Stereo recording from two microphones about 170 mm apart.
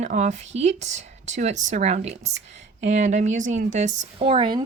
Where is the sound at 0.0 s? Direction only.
45° right (ahead or behind).